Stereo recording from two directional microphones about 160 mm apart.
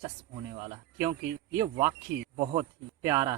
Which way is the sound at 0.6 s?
25° right (ahead or behind).